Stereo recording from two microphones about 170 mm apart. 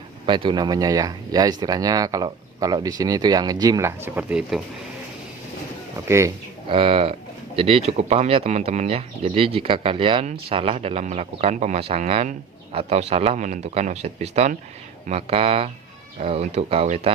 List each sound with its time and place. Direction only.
0.3 s speech: 30° right (ahead or behind); by 4.6 s 5° right (ahead or behind)
6.1 s speech: 15° right (ahead or behind)
6.7 s speech: 35° right (ahead or behind)